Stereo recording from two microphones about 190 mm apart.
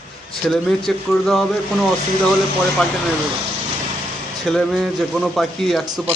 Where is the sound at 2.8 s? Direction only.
5° left (ahead or behind).